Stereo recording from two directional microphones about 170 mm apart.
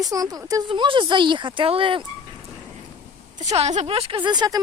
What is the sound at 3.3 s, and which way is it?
A woman's voice, 40° right (ahead or behind).